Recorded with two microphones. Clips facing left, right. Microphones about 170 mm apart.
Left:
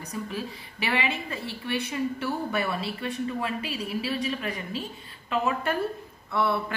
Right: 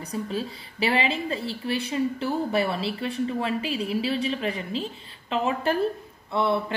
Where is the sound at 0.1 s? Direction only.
30° right (ahead or behind).